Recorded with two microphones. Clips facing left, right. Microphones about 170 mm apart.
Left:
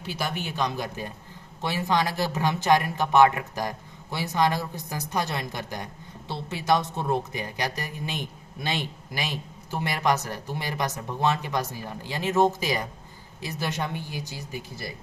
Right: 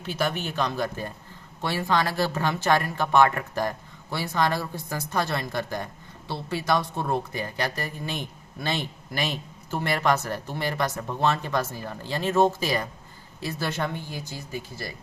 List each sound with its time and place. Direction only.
0.4 s speech: 15° left (ahead or behind)